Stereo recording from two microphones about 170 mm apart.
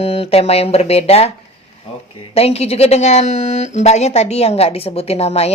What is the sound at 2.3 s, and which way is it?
Speech, 35° left (ahead or behind).